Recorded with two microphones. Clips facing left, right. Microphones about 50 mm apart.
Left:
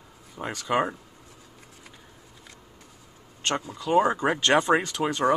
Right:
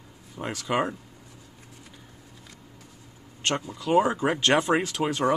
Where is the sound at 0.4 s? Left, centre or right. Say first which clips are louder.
Even; centre.